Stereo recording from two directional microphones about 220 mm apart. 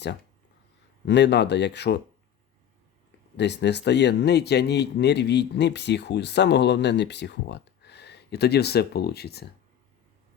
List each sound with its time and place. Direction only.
1.0 s speech: 50° left (ahead or behind)
3.3 s speech: 50° left (ahead or behind)